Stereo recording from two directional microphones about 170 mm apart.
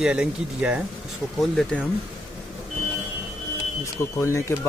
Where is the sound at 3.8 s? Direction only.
15° left (ahead or behind).